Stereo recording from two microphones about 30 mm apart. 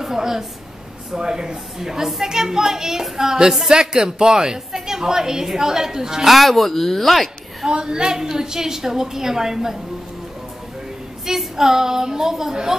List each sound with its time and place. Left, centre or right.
0.0 s a woman's voice: centre
6.2 s speech: centre
7.6 s a woman's voice: right
11.2 s a woman's voice: centre